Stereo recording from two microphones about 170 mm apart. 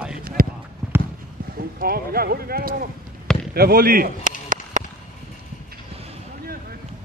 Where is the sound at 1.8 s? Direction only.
60° right (ahead or behind).